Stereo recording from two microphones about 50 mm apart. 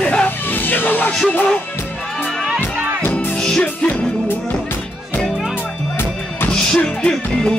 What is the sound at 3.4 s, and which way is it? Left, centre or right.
Music, centre.